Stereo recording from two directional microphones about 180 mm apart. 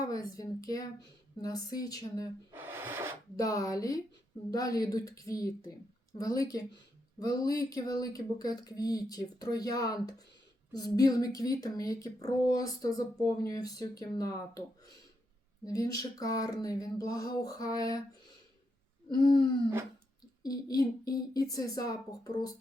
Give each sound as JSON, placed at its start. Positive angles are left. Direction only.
{"t": 0.0, "sound": "a woman's voice", "side_deg": 20}
{"t": 2.5, "sound": "rub", "side_deg": -10}
{"t": 3.3, "sound": "speech", "side_deg": 20}
{"t": 15.6, "sound": "speech", "side_deg": 20}
{"t": 20.4, "sound": "speech", "side_deg": 20}